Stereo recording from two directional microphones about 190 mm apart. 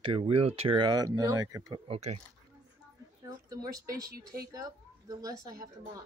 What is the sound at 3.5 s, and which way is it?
Speech, 20° right (ahead or behind).